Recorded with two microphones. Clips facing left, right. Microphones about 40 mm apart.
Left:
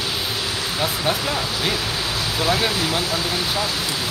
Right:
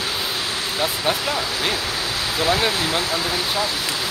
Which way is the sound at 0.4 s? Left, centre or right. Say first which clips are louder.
Even; right.